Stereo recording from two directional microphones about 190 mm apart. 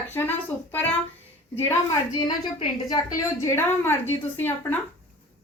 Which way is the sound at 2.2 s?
20° left (ahead or behind).